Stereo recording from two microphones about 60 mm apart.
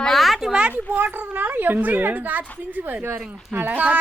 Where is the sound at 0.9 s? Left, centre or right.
Right.